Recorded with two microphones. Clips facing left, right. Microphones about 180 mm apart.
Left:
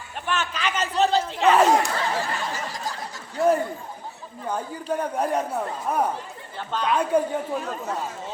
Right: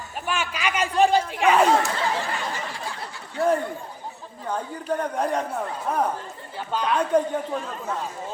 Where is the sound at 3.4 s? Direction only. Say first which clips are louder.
Left 1 dB; centre (ahead or behind).